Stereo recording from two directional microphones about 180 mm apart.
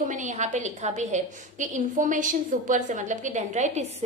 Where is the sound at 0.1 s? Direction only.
45° right (ahead or behind).